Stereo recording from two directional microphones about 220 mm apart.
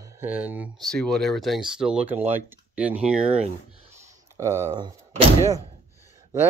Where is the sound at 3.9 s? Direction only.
15° right (ahead or behind).